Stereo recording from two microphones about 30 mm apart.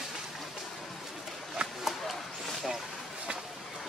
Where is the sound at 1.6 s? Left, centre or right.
Right.